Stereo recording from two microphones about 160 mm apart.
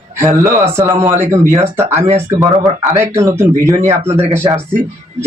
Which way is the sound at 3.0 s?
15° right (ahead or behind).